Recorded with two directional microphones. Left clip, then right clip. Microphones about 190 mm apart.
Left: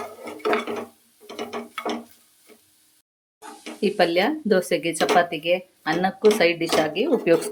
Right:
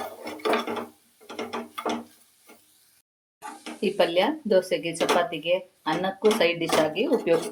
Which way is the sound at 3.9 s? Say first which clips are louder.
Left 2 dB; 30° left (ahead or behind).